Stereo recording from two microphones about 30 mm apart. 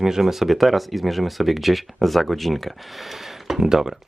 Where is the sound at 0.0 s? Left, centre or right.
Centre.